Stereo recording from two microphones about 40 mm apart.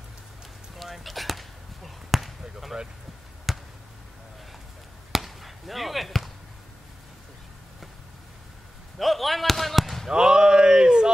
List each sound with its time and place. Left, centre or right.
0.7 s basketball bounce: centre
5.1 s basketball bounce: centre
8.9 s speech: centre
10.0 s a sound: centre